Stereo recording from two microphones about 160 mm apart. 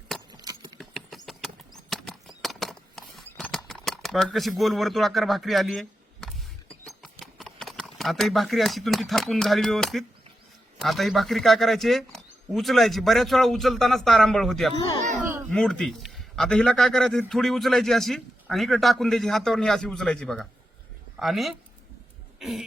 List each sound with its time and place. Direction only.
0.3 s a sound: 25° right (ahead or behind)
0.8 s horse: centre (ahead or behind)
1.9 s a sound: centre (ahead or behind)
6.8 s a man's voice: centre (ahead or behind)
14.8 s speech: 30° left (ahead or behind)
15.0 s speech: 50° right (ahead or behind)
15.4 s a man's voice: 5° left (ahead or behind)
22.4 s cough: centre (ahead or behind)